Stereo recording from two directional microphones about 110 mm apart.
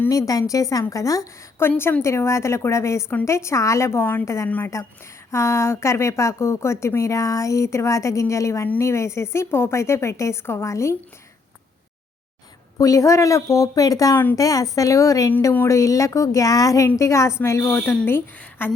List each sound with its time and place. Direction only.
0.1 s a woman's voice: 35° left (ahead or behind)
12.8 s a woman's voice: 30° left (ahead or behind)